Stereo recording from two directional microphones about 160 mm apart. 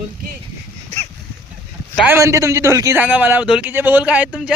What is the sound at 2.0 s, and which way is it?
A man's voice, 15° right (ahead or behind).